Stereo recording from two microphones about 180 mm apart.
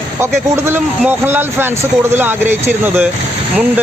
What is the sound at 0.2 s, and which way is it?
A man's voice, 15° right (ahead or behind).